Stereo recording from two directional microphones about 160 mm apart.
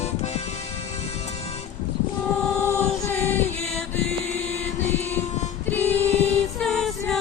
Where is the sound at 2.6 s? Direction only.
15° left (ahead or behind).